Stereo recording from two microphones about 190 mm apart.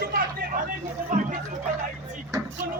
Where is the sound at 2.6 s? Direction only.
50° right (ahead or behind).